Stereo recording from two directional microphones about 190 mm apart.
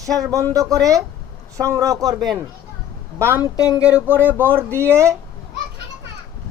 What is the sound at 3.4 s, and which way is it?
Speech, 20° left (ahead or behind).